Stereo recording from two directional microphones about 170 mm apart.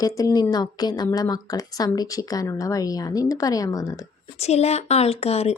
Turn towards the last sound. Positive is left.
turn(degrees=40)  # may be behind; listen again after turning